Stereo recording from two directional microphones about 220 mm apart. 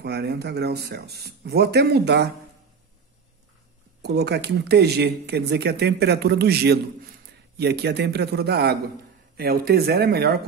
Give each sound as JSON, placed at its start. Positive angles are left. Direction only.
{"t": 0.0, "sound": "speech", "side_deg": -50}
{"t": 4.0, "sound": "speech", "side_deg": -50}